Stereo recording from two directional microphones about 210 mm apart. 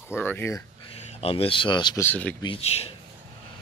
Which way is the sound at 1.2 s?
25° left (ahead or behind).